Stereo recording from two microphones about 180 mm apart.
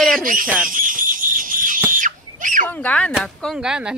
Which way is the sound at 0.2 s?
50° right (ahead or behind).